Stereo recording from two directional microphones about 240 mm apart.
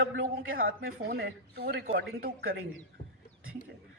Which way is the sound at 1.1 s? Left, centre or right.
Right.